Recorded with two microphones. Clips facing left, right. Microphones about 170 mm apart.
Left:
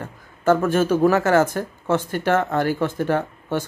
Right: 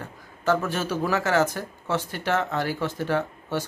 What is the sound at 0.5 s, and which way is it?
Speech, 50° left (ahead or behind).